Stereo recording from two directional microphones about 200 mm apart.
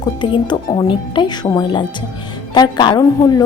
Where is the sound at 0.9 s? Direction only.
25° left (ahead or behind).